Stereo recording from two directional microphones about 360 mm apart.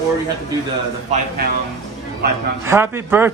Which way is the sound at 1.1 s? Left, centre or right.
Right.